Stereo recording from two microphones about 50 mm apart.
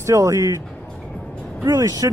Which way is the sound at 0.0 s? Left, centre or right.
Right.